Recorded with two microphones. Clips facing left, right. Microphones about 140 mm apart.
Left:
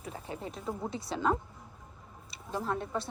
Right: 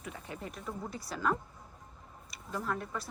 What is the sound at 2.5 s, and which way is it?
Speech, 25° left (ahead or behind).